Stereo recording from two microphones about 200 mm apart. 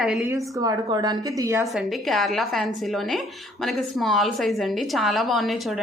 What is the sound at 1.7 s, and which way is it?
A woman's voice, centre (ahead or behind).